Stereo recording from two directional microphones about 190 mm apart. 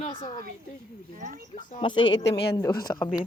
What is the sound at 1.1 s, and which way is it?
Speech, 45° right (ahead or behind).